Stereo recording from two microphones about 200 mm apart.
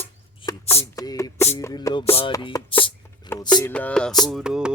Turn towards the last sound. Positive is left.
turn(degrees=-5)  # may be behind; listen again after turning